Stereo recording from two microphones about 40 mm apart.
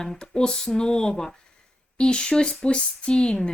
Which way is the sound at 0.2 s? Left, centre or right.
Left.